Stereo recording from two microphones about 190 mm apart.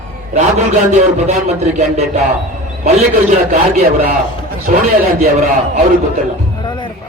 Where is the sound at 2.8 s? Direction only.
40° right (ahead or behind).